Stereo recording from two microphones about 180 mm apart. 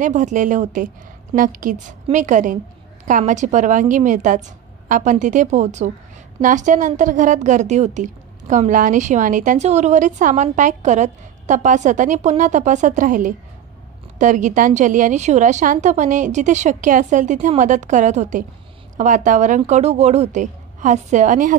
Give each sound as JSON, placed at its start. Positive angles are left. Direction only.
{"t": 0.0, "sound": "a woman's voice", "side_deg": -45}